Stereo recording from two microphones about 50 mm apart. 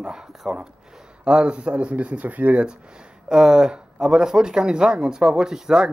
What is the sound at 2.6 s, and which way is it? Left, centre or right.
Speech, centre.